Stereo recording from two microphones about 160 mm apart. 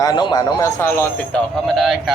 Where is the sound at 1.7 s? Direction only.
Centre (ahead or behind).